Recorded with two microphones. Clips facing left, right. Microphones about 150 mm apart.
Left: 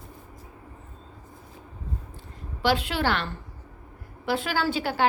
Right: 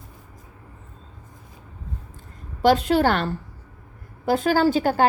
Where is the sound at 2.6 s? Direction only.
40° right (ahead or behind).